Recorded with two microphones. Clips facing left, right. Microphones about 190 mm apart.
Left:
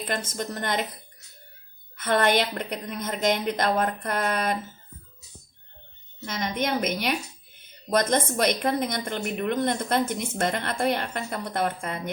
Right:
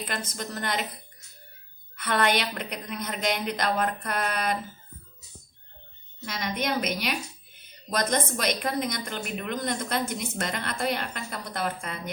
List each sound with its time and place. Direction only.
0.3 s a woman's voice: 50° left (ahead or behind)
2.0 s a woman's voice: 45° left (ahead or behind)
6.2 s a woman's voice: 50° left (ahead or behind)